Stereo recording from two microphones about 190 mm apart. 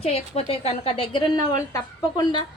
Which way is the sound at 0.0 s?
30° left (ahead or behind).